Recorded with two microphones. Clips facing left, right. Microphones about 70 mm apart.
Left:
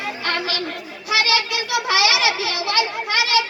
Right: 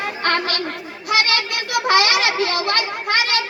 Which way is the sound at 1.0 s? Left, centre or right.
Right.